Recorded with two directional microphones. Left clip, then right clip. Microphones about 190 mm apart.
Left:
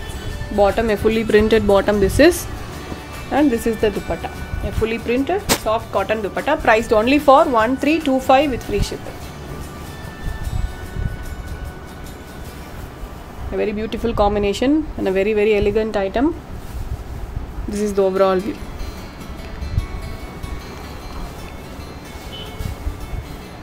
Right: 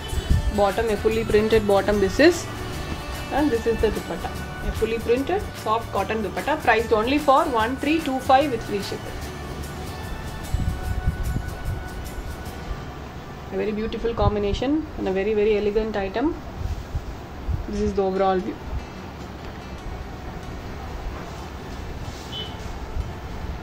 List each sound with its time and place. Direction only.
0.6 s speech: 55° left (ahead or behind)
1.5 s speech: 30° left (ahead or behind)
3.3 s speech: 60° left (ahead or behind)
13.6 s speech: 65° left (ahead or behind)
17.8 s speech: 50° left (ahead or behind)